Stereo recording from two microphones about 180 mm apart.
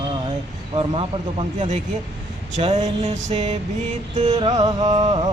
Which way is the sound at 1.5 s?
45° right (ahead or behind).